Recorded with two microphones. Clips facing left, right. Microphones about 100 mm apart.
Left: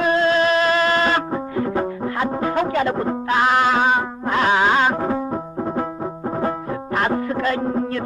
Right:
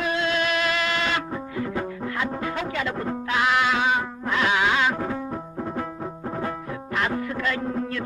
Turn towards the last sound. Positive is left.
turn(degrees=40)  # may be behind; listen again after turning